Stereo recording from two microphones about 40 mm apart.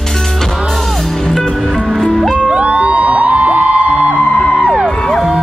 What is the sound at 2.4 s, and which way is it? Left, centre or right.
Music, right.